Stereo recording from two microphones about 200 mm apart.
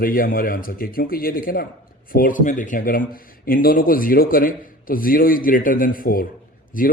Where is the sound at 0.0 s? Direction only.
45° left (ahead or behind).